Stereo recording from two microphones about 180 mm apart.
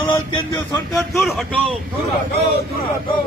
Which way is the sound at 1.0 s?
Centre (ahead or behind).